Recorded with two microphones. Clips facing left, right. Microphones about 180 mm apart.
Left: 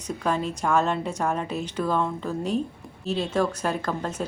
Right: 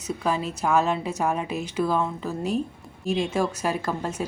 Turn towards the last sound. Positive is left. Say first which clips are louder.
# even
turn(degrees=-10)  # may be behind; listen again after turning